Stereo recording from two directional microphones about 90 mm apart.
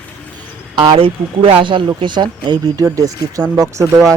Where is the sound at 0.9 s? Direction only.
90° right; by 1.8 s 70° right (ahead or behind).